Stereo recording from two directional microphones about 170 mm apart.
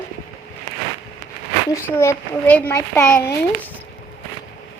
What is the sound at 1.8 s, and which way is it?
Speech, 15° left (ahead or behind).